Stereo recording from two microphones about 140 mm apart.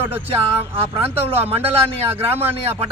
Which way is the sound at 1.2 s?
45° right (ahead or behind).